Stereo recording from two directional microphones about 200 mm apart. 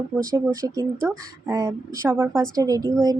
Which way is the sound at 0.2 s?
15° right (ahead or behind).